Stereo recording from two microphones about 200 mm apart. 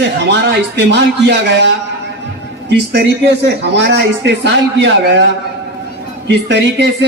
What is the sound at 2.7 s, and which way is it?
Speech, 55° right (ahead or behind).